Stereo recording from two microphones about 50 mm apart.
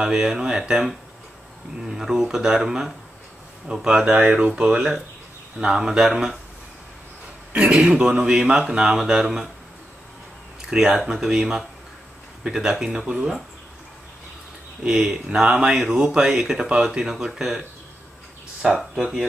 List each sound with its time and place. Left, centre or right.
0.0 s speech: centre
3.9 s speech: right; by 6.3 s centre
7.5 s speech: right
10.7 s speech: centre
14.8 s speech: right